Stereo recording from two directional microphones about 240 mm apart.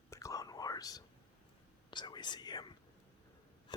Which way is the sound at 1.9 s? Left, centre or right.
Centre.